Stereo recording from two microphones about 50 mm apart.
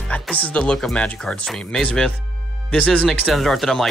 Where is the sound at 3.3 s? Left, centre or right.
Centre.